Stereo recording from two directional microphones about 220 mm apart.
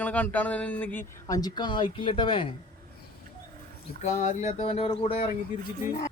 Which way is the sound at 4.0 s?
35° left (ahead or behind).